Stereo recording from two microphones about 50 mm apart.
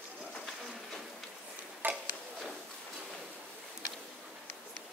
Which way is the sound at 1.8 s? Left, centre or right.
Right.